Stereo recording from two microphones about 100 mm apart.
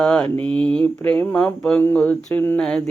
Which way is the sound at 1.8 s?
15° left (ahead or behind).